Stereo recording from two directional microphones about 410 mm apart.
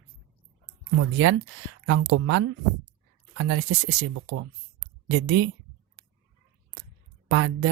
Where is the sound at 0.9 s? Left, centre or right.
Right.